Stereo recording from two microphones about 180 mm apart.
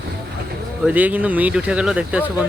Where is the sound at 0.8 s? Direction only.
10° right (ahead or behind).